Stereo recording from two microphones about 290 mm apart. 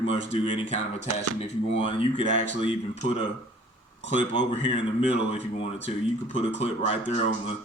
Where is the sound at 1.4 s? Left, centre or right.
Centre.